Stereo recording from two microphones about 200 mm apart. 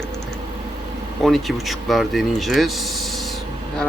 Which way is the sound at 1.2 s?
Centre (ahead or behind).